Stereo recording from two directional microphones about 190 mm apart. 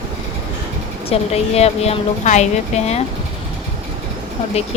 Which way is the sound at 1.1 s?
35° left (ahead or behind).